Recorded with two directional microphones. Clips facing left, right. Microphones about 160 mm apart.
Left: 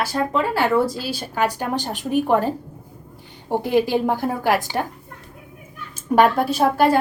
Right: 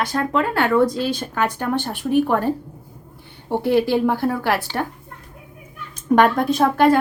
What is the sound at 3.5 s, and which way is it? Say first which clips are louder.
Speech: right 1 dB; 15° left (ahead or behind).